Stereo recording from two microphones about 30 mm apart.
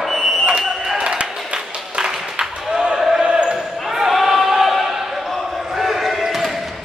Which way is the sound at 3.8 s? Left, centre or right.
Centre.